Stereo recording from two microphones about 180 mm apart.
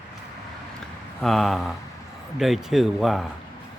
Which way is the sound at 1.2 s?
Centre (ahead or behind).